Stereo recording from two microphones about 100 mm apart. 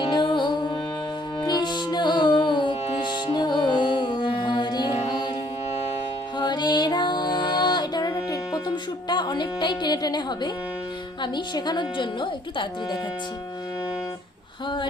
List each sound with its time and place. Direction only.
0.0 s music: 45° left (ahead or behind)
6.4 s music: 45° left (ahead or behind)
11.2 s speech: 45° left (ahead or behind)